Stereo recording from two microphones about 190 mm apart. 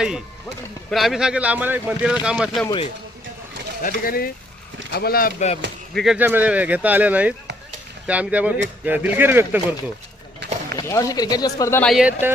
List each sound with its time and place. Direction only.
0.9 s speech: centre (ahead or behind)
2.6 s speech: 25° left (ahead or behind)
3.8 s speech: 45° left (ahead or behind)
5.9 s speech: centre (ahead or behind)
6.1 s speech: 10° right (ahead or behind)
10.4 s a sound: 65° right (ahead or behind)
10.8 s speech: 15° left (ahead or behind)
11.8 s speech: centre (ahead or behind)